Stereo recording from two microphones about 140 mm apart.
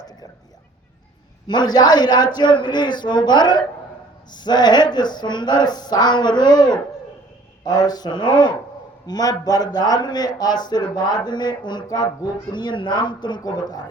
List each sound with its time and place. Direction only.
1.5 s a man's voice: 30° left (ahead or behind)